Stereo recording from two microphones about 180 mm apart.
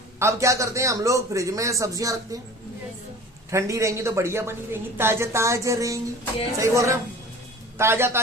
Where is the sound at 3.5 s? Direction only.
15° right (ahead or behind).